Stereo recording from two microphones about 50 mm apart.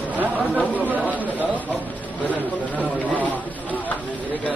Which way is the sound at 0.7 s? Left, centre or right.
Right.